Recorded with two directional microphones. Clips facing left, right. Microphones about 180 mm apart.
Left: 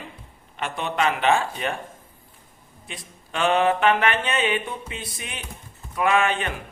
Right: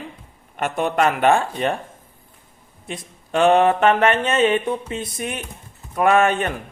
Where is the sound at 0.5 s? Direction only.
50° right (ahead or behind).